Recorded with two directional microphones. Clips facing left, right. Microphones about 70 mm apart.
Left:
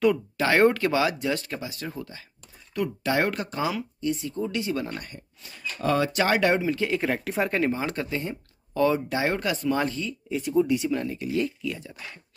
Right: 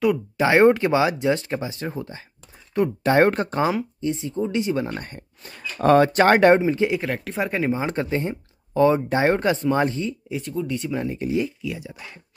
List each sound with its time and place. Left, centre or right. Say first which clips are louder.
0.4 s speech: right 5 dB; centre
5.0 s speech: right 4 dB; right
6.6 s speech: right 5 dB; right
7.0 s speech: even; centre
7.7 s speech: right 5 dB; right
10.5 s speech: left 6 dB; centre
10.9 s speech: right 1 dB; centre
11.3 s speech: left 1 dB; centre